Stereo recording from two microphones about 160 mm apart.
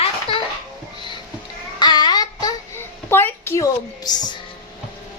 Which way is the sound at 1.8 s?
25° left (ahead or behind).